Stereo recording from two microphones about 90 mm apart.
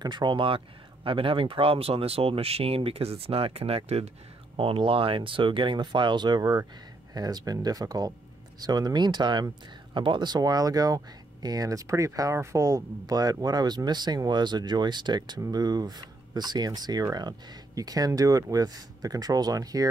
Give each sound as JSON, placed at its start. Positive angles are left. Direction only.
{"t": 0.0, "sound": "speech", "side_deg": -55}
{"t": 1.0, "sound": "speech", "side_deg": -80}